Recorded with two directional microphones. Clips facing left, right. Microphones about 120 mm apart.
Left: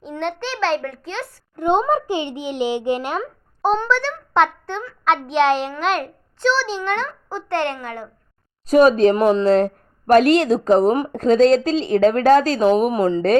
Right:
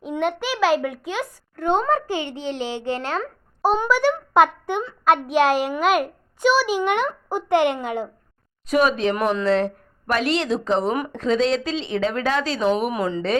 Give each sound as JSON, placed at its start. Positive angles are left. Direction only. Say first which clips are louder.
{"t": 0.0, "sound": "a child's voice", "louder": "right 2 dB", "side_deg": -5}
{"t": 1.5, "sound": "a child's voice", "louder": "left 3 dB", "side_deg": 20}
{"t": 3.6, "sound": "a child's voice", "louder": "even", "side_deg": -5}
{"t": 8.6, "sound": "a woman's voice", "louder": "left 7 dB", "side_deg": 40}